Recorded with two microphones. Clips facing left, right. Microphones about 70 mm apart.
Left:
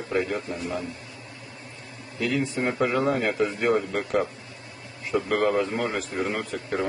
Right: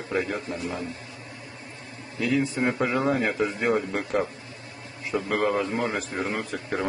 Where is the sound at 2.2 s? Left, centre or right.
Centre.